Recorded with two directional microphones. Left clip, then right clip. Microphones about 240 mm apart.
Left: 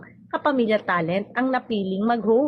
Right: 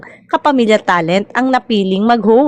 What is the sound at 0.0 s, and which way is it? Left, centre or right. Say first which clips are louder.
A woman's voice: right 10 dB; right.